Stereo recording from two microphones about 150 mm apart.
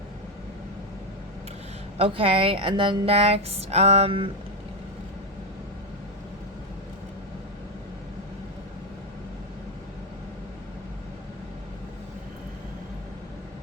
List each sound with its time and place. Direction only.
2.0 s a woman's voice: 40° right (ahead or behind)